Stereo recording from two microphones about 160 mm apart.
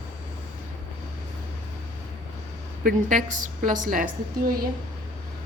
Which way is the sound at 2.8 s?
60° right (ahead or behind).